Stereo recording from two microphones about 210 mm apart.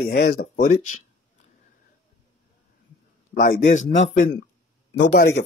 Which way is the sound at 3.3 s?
40° left (ahead or behind).